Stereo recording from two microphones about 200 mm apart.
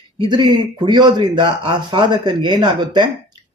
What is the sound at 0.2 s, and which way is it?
Speech, 20° right (ahead or behind).